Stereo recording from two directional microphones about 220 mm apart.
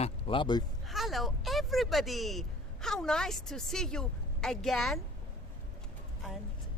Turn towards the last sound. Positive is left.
turn(degrees=0)  # may be behind; listen again after turning